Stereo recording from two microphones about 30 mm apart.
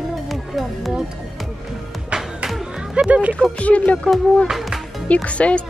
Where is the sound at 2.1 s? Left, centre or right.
Right.